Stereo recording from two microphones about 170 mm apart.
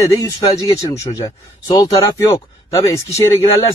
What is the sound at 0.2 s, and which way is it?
Speech, 25° left (ahead or behind).